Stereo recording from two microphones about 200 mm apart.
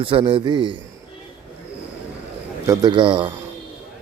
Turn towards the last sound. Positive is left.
turn(degrees=-25)  # may be behind; listen again after turning